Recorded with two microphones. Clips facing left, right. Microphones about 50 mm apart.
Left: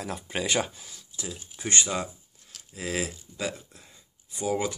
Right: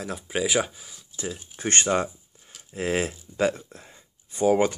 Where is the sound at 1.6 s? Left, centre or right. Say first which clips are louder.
Right 5 dB; right.